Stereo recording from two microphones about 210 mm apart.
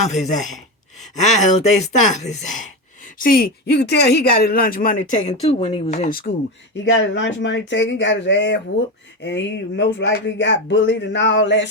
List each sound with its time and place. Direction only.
0.0 s speech: 35° left (ahead or behind)
7.1 s speech: 60° left (ahead or behind)